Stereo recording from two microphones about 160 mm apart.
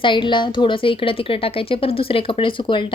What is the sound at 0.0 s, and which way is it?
A woman's voice, 30° left (ahead or behind).